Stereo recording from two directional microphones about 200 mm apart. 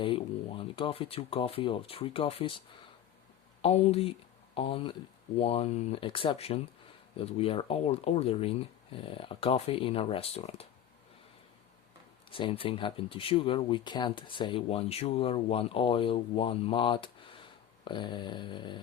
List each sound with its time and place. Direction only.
0.0 s speech: 25° left (ahead or behind)
3.6 s speech: 30° left (ahead or behind)
12.3 s speech: 25° left (ahead or behind)